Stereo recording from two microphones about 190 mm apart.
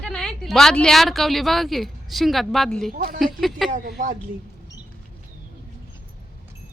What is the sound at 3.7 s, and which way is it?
Speech, 50° right (ahead or behind).